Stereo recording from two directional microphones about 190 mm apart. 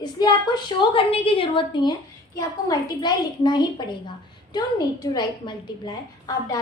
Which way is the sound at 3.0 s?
20° left (ahead or behind).